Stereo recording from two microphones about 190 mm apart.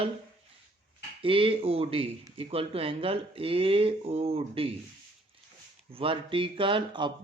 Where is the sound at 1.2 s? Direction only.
30° right (ahead or behind).